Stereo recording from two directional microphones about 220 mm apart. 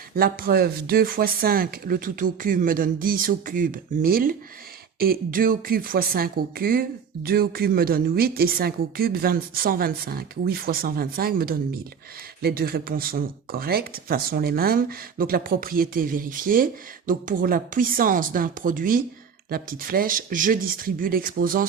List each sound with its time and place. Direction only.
0.2 s speech: 45° right (ahead or behind)